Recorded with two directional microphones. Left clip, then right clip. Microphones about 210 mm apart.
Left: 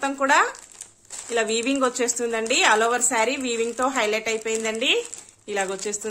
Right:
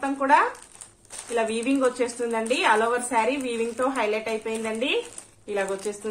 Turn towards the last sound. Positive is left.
turn(degrees=45)  # may be behind; listen again after turning